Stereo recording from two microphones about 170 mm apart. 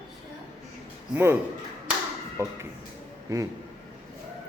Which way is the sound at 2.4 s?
15° right (ahead or behind).